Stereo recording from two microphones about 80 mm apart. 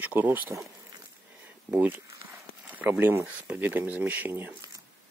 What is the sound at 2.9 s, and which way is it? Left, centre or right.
Speech, right.